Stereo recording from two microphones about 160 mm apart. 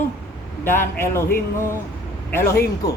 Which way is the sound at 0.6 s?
15° left (ahead or behind).